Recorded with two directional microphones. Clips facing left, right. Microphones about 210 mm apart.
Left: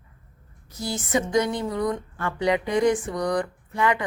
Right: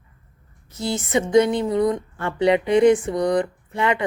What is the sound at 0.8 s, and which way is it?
Speech, 25° right (ahead or behind).